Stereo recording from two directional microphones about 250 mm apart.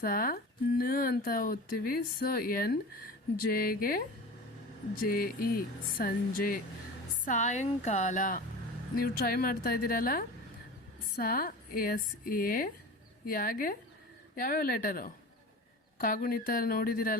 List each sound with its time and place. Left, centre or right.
0.0 s speech: left
5.0 s a woman's voice: left